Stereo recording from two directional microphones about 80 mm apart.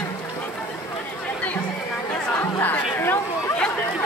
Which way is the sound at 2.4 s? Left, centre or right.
Left.